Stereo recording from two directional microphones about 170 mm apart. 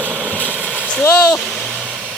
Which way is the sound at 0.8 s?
10° left (ahead or behind).